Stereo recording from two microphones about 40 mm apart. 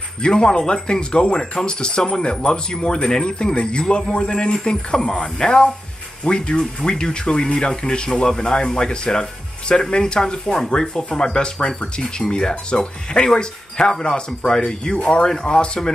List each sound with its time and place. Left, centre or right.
0.2 s speech: left